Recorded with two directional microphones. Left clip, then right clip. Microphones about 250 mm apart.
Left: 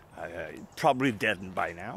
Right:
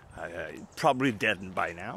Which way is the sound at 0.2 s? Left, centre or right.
Centre.